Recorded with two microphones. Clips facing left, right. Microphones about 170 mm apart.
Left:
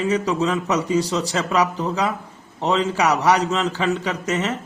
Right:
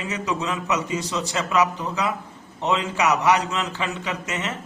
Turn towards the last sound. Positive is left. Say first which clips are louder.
# left 6 dB
turn(degrees=35)  # may be behind; listen again after turning